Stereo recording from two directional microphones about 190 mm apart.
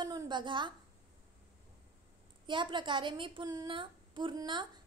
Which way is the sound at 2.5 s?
25° right (ahead or behind).